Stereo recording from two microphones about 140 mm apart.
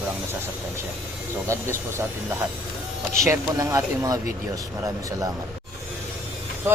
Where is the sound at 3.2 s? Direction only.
20° right (ahead or behind).